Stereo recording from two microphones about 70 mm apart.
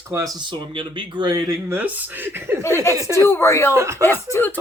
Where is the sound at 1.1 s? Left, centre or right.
Right.